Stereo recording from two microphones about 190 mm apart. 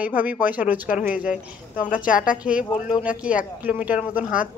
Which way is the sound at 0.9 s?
45° left (ahead or behind).